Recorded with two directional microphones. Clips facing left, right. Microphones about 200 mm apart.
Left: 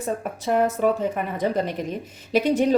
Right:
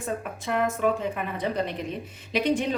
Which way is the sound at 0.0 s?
40° left (ahead or behind).